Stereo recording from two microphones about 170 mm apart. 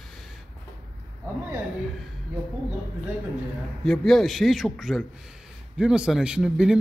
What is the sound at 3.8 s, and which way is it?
Speech, centre (ahead or behind).